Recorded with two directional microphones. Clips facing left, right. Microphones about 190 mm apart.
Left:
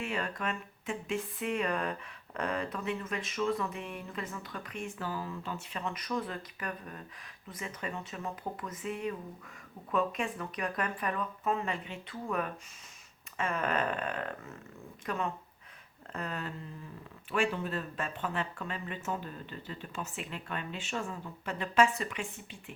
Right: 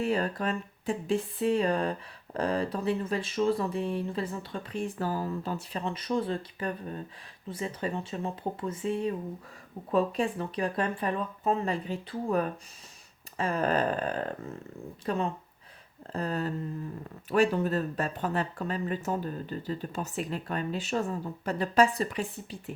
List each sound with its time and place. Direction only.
0.0 s speech: 35° right (ahead or behind)